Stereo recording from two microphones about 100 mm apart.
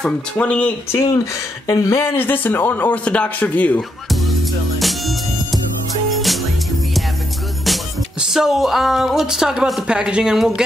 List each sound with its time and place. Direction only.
0.0 s speech: 10° left (ahead or behind)
0.9 s a man's voice: 35° left (ahead or behind); by 3.8 s 15° left (ahead or behind)
4.7 s music: centre (ahead or behind)
7.6 s music: centre (ahead or behind)